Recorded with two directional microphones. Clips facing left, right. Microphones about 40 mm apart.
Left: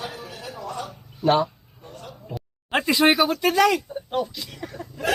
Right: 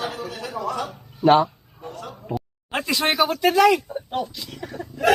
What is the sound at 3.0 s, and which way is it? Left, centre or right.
Speech, centre.